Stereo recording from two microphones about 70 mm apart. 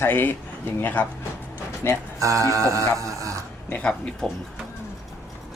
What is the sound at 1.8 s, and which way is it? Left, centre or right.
Speech, left.